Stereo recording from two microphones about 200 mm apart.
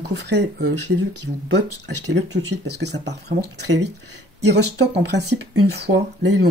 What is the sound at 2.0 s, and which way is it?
Speech, 60° right (ahead or behind).